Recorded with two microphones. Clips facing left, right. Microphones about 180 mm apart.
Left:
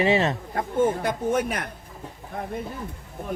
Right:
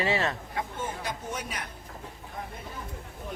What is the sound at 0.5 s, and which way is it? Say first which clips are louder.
Speech: left 11 dB; 55° left (ahead or behind).